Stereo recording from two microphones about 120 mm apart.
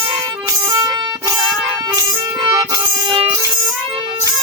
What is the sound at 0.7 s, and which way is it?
Music, 30° right (ahead or behind).